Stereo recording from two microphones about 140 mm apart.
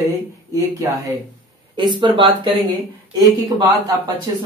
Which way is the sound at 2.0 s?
35° right (ahead or behind).